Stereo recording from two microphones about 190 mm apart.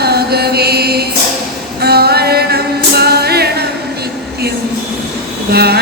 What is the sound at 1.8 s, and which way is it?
Music, 55° right (ahead or behind).